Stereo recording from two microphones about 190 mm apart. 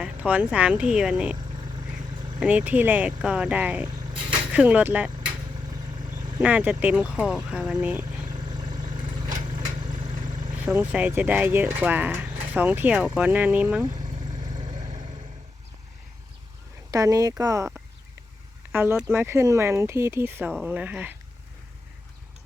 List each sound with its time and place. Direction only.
0.0 s speech: 10° right (ahead or behind)
1.5 s vehicle: 25° right (ahead or behind)
2.4 s speech: 5° right (ahead or behind)
3.8 s vehicle: 20° right (ahead or behind)
4.5 s speech: 10° right (ahead or behind)
5.9 s vehicle: 20° right (ahead or behind)
6.4 s speech: 10° right (ahead or behind)
8.0 s vehicle: 20° right (ahead or behind)
10.9 s speech: 10° right (ahead or behind)
13.8 s vehicle: 20° right (ahead or behind)
16.9 s speech: 20° right (ahead or behind)